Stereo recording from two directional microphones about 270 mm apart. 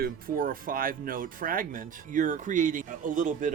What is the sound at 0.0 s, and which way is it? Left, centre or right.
Speech, right.